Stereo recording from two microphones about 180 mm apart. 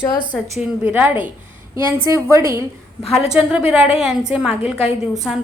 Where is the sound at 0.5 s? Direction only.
10° right (ahead or behind).